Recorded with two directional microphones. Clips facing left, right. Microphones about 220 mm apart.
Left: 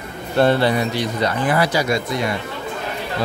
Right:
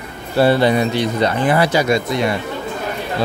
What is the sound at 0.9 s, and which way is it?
Speech, 25° right (ahead or behind).